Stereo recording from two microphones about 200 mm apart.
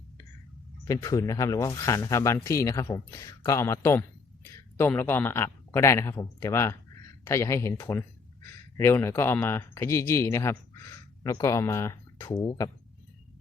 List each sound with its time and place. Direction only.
0.9 s speech: 15° left (ahead or behind)